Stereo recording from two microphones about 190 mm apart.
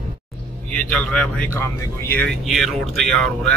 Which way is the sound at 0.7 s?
5° left (ahead or behind).